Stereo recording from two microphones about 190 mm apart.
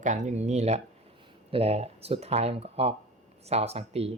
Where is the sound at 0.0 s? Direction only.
40° right (ahead or behind).